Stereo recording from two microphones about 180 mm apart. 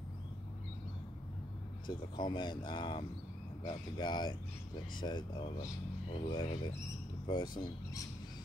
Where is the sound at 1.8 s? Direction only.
25° left (ahead or behind).